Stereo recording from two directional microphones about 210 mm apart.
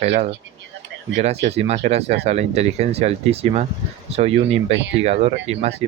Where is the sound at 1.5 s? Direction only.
30° right (ahead or behind).